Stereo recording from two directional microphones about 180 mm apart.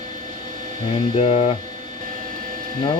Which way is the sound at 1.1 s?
35° left (ahead or behind).